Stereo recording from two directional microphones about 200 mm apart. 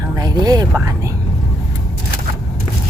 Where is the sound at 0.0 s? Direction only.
20° right (ahead or behind).